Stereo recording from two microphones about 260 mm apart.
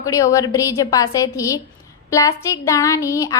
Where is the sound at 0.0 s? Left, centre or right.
Centre.